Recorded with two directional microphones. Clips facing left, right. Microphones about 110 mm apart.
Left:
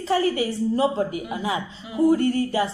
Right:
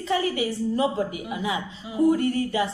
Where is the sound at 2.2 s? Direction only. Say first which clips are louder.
Left 2 dB; 35° left (ahead or behind).